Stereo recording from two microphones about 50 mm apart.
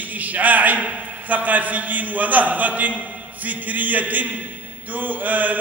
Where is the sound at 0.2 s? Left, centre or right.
Right.